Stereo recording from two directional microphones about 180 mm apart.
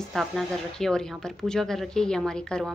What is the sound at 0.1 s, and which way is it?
Speech, centre (ahead or behind).